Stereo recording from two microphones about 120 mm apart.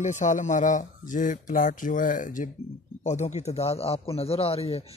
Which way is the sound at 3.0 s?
80° left.